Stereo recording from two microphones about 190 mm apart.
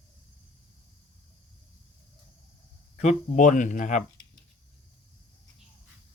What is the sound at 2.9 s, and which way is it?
Speech, 40° left (ahead or behind).